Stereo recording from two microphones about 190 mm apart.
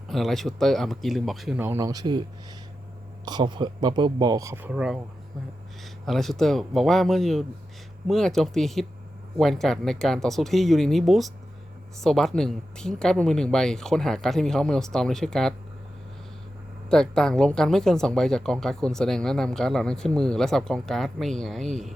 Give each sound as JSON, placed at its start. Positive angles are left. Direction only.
{"t": 0.1, "sound": "speech", "side_deg": 0}
{"t": 3.2, "sound": "speech", "side_deg": -25}
{"t": 16.9, "sound": "speech", "side_deg": 5}